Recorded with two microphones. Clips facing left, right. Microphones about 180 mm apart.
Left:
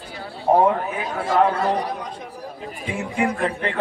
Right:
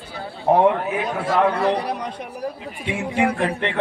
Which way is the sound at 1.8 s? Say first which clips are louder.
Right 1 dB; 70° right (ahead or behind).